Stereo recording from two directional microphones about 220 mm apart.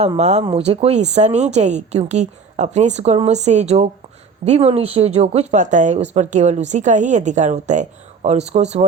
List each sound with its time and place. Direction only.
0.0 s speech: 30° right (ahead or behind)